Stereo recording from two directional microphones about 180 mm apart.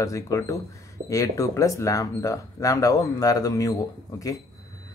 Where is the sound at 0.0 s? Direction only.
15° left (ahead or behind).